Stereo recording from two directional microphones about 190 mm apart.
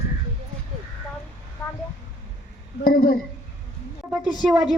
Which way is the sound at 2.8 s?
50° left (ahead or behind).